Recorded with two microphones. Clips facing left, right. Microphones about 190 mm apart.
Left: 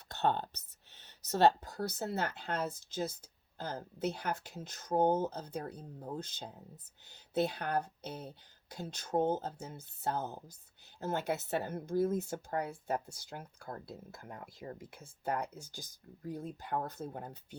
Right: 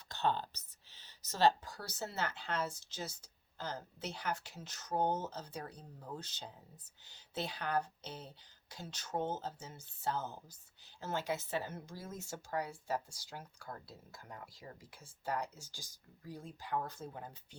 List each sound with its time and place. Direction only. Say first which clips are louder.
0.1 s speech: left 3 dB; 60° left (ahead or behind)